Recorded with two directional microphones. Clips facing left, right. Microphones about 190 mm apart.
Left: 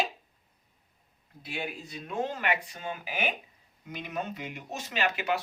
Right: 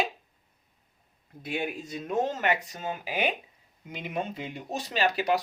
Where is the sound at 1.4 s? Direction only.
45° right (ahead or behind).